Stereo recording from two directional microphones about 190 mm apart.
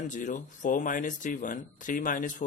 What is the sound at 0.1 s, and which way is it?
A man's voice, 45° left (ahead or behind).